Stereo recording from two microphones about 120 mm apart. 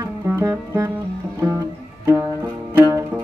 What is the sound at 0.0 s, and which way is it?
Music, 25° right (ahead or behind).